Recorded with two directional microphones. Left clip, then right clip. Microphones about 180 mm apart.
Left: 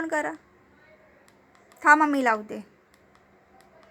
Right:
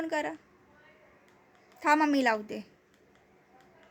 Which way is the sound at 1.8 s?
15° right (ahead or behind).